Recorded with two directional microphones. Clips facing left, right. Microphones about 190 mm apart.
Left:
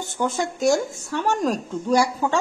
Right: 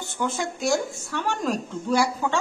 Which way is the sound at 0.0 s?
45° left (ahead or behind).